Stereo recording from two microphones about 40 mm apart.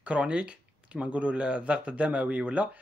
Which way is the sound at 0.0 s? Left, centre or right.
Right.